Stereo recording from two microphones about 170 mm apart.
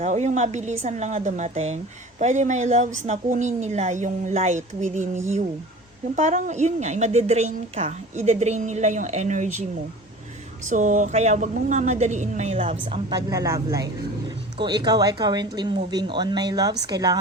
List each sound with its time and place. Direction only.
0.0 s a woman's voice: 45° right (ahead or behind)
10.7 s a woman's voice: 50° right (ahead or behind)
13.1 s speech: 20° right (ahead or behind)